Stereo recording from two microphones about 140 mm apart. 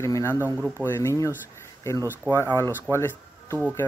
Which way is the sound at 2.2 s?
15° right (ahead or behind).